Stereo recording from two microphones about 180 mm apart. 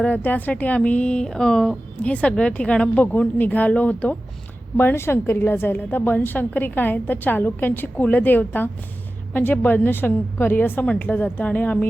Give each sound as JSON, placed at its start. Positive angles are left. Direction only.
{"t": 0.0, "sound": "speech", "side_deg": 10}